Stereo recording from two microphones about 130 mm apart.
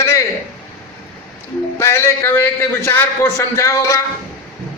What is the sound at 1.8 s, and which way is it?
A man's voice, 20° left (ahead or behind).